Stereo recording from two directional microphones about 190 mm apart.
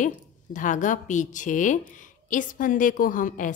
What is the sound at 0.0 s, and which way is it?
A woman's voice, 40° left (ahead or behind).